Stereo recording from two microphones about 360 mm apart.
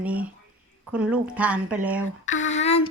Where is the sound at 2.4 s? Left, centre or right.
Centre.